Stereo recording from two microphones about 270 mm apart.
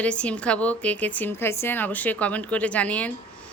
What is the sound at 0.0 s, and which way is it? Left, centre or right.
A woman's voice, centre.